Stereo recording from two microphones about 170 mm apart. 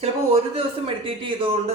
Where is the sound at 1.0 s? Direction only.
30° right (ahead or behind).